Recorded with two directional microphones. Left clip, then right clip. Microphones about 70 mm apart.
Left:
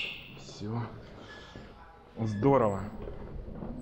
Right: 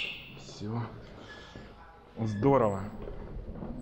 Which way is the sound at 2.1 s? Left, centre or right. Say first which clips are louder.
Even; left.